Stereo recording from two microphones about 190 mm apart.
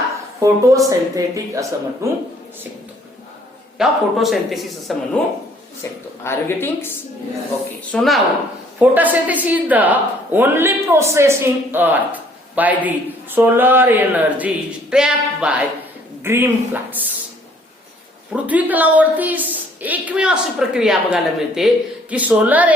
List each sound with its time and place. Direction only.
0.3 s speech: 15° right (ahead or behind)
3.8 s speech: centre (ahead or behind)
5.8 s a woman's voice: 15° left (ahead or behind)
7.9 s speech: centre (ahead or behind)
18.3 s speech: 10° right (ahead or behind)